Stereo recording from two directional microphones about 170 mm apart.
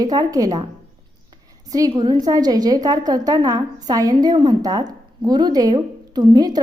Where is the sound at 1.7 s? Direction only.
20° right (ahead or behind).